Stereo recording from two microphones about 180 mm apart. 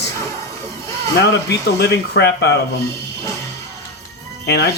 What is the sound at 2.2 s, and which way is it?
Speech, 65° left (ahead or behind).